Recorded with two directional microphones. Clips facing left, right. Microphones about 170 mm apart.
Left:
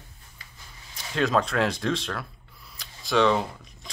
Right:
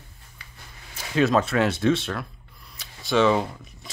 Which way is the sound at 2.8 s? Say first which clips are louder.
Right 2 dB; centre (ahead or behind).